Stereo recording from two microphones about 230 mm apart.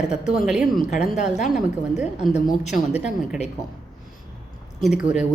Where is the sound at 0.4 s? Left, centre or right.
Centre.